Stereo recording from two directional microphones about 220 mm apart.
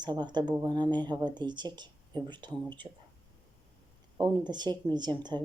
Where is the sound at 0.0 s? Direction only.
20° right (ahead or behind).